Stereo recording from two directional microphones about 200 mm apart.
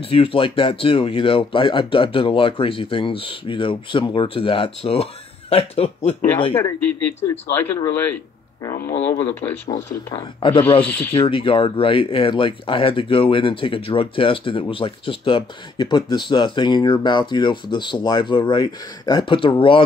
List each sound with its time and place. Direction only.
0.0 s speech: 25° left (ahead or behind)
6.5 s speech: 10° left (ahead or behind)
9.1 s speech: 10° left (ahead or behind)
10.1 s speech: 25° left (ahead or behind)
10.9 s speech: 10° left (ahead or behind)
11.1 s speech: 25° left (ahead or behind)